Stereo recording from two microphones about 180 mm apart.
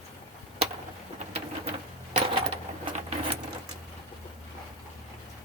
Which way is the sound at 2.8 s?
30° right (ahead or behind).